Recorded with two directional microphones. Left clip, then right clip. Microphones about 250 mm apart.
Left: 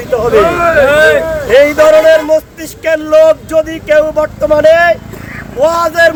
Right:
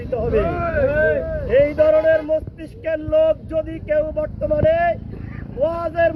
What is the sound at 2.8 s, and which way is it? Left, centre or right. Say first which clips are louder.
A man's voice: left 11 dB; centre.